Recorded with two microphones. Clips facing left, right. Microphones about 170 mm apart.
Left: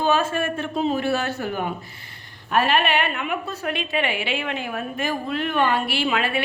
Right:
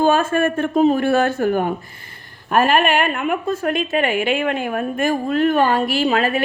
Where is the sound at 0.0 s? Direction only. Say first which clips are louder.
Right 5 dB; 50° right (ahead or behind).